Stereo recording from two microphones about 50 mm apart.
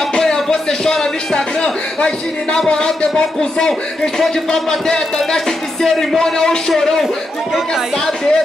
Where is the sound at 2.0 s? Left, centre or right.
Centre.